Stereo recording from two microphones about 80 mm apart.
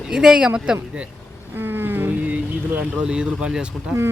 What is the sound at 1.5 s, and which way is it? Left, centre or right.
Boat, right.